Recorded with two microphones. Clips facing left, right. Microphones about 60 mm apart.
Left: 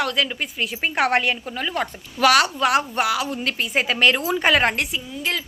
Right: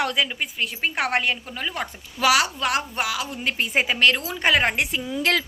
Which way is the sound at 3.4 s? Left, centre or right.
Right.